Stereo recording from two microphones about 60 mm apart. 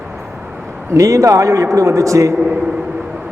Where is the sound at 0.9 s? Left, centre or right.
Right.